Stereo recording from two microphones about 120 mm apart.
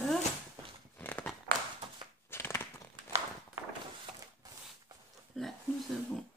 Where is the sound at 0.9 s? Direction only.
15° left (ahead or behind).